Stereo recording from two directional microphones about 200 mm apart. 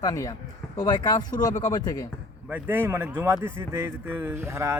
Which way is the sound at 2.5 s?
10° right (ahead or behind).